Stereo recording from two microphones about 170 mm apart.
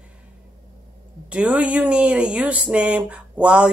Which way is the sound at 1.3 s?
5° right (ahead or behind).